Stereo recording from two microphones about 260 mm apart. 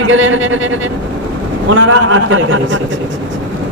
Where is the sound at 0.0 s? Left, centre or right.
Right.